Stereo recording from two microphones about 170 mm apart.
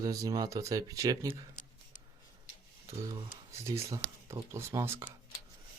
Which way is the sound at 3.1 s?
20° right (ahead or behind).